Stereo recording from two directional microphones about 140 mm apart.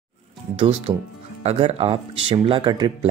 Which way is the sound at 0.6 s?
45° right (ahead or behind).